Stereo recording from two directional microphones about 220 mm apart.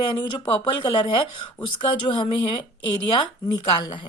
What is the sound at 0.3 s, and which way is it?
Speech, 20° left (ahead or behind).